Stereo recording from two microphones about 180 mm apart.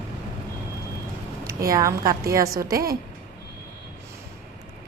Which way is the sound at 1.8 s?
20° right (ahead or behind).